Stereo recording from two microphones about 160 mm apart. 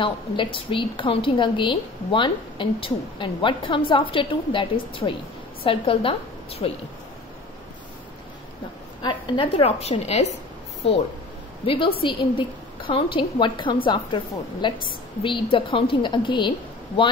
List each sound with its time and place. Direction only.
0.0 s a woman's voice: 35° left (ahead or behind)
9.0 s a woman's voice: 35° left (ahead or behind)
11.6 s a woman's voice: 35° left (ahead or behind)